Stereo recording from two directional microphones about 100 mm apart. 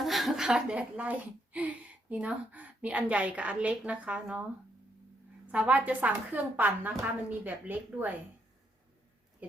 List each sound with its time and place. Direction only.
0.0 s a woman's voice: centre (ahead or behind)
5.5 s a woman's voice: 15° right (ahead or behind)
9.4 s a woman's voice: 15° right (ahead or behind)